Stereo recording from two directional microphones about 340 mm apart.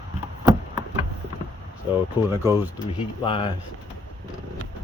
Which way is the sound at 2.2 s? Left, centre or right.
Centre.